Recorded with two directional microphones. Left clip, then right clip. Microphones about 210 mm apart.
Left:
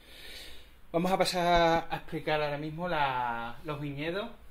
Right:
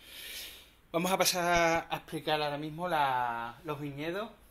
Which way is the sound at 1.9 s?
20° right (ahead or behind).